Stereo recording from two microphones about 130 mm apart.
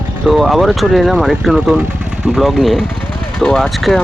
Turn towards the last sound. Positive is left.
turn(degrees=0)  # may be behind; listen again after turning